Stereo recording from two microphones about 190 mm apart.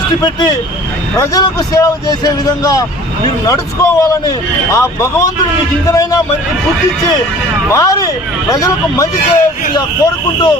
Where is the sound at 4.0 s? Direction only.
15° left (ahead or behind).